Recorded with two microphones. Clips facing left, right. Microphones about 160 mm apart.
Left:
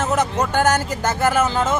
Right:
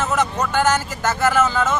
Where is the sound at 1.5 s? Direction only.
20° left (ahead or behind).